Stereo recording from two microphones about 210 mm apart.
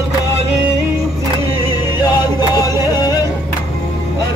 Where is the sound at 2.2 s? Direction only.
20° left (ahead or behind).